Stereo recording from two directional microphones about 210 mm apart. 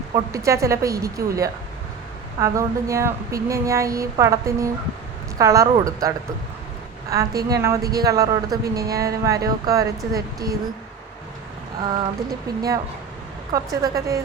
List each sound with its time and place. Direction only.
0.1 s a woman's voice: 15° right (ahead or behind)
12.5 s a woman's voice: 15° right (ahead or behind)